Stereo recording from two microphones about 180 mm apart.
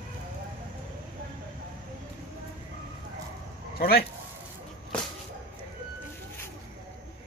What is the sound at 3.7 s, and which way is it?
Speech, 60° left (ahead or behind).